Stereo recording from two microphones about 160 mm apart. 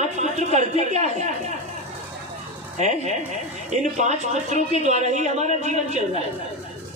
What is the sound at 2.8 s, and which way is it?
A man's voice, 45° right (ahead or behind).